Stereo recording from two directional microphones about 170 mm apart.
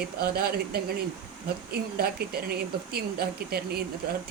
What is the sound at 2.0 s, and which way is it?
Speech, 65° right (ahead or behind).